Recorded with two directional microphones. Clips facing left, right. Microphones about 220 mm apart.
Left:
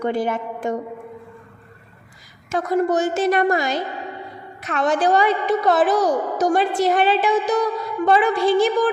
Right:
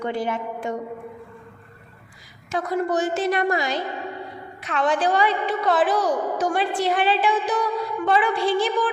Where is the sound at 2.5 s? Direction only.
45° left (ahead or behind).